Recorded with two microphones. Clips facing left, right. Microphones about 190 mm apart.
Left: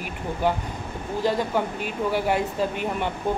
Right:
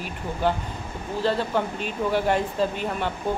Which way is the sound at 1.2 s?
10° left (ahead or behind).